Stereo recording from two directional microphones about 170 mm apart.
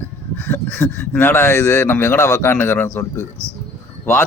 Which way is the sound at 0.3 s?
10° left (ahead or behind).